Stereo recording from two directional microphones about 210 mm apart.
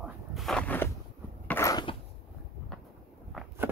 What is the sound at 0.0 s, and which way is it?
Walk, centre (ahead or behind).